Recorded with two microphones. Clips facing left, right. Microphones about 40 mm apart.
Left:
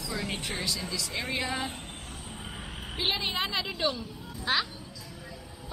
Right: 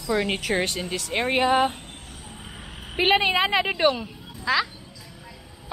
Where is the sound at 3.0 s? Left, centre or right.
Right.